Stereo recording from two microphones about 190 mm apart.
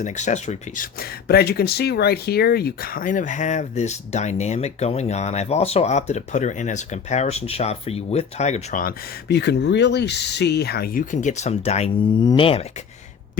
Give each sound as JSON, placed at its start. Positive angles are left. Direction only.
{"t": 0.0, "sound": "speech", "side_deg": 40}
{"t": 0.9, "sound": "speech", "side_deg": 55}